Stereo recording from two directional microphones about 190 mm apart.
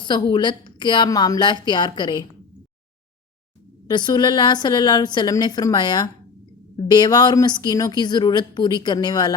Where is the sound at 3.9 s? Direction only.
25° left (ahead or behind).